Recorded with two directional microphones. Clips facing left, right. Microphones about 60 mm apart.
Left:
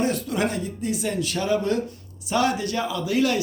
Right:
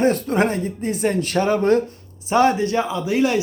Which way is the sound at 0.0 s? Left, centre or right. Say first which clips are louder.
Right 6 dB; right.